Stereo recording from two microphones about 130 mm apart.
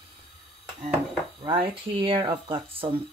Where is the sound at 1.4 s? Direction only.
40° right (ahead or behind).